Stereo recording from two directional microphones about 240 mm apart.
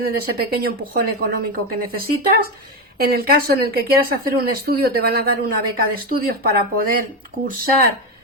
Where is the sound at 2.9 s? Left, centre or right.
Right.